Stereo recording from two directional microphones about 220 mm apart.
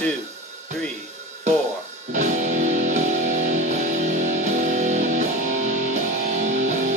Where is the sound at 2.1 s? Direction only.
35° right (ahead or behind).